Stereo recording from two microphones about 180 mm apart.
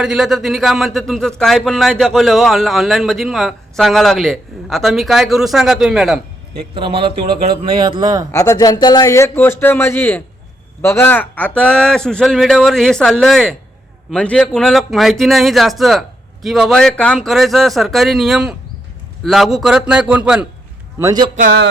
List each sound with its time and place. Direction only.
0.0 s a man's voice: centre (ahead or behind)
6.6 s speech: 30° right (ahead or behind)
8.3 s a man's voice: 15° left (ahead or behind); by 20.5 s 5° right (ahead or behind)
21.0 s speech: 20° right (ahead or behind)